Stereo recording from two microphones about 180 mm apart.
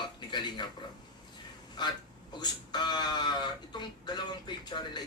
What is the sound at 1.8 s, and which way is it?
Speech, 25° left (ahead or behind).